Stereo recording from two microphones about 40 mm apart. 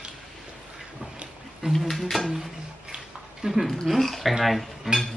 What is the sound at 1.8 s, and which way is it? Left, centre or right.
Speech, centre.